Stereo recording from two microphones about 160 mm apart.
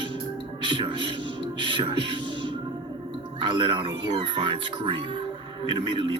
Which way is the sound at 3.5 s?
30° right (ahead or behind).